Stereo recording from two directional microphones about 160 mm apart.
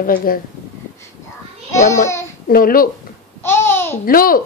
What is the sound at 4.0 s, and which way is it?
Speech, 65° left (ahead or behind).